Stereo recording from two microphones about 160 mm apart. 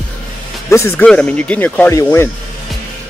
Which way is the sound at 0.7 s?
15° left (ahead or behind).